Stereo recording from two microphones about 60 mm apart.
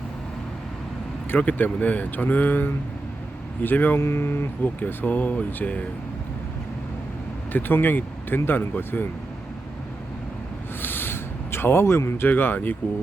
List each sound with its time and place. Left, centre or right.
1.4 s speech: left
4.0 s speech: left
7.5 s speech: left
10.8 s a sound: left